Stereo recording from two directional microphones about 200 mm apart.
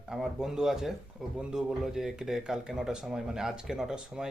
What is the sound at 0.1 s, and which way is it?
Speech, 5° right (ahead or behind).